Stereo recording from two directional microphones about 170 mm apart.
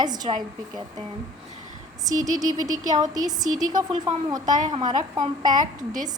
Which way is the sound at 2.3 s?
20° right (ahead or behind).